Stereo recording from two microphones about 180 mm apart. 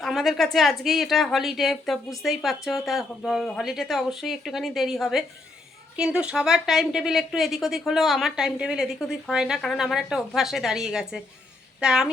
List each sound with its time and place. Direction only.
0.0 s a woman's voice: centre (ahead or behind)